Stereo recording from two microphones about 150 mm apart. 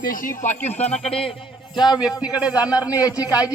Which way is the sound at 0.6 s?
45° left (ahead or behind).